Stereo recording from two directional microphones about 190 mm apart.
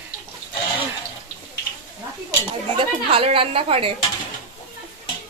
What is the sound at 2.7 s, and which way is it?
A woman's voice, 30° right (ahead or behind).